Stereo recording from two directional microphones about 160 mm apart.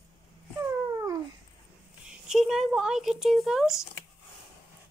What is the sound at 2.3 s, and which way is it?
Speech, centre (ahead or behind).